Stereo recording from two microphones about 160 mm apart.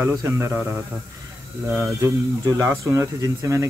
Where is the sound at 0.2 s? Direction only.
20° right (ahead or behind).